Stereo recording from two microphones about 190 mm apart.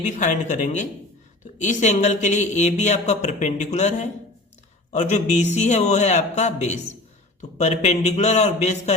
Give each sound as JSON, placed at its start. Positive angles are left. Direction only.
{"t": 0.0, "sound": "speech", "side_deg": 40}